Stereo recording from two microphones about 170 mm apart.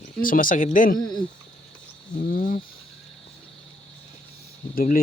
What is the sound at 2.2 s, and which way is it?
Speech, 55° left (ahead or behind).